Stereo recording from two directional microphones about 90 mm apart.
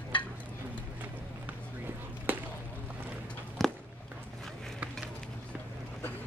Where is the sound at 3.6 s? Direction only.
5° left (ahead or behind).